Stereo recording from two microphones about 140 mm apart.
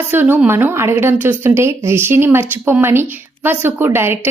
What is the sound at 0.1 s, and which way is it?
Speech, 15° right (ahead or behind).